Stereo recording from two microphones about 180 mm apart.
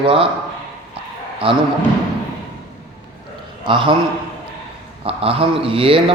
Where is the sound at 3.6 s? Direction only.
25° right (ahead or behind).